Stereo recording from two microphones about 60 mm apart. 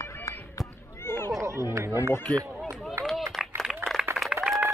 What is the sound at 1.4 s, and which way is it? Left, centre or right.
Chatter, right.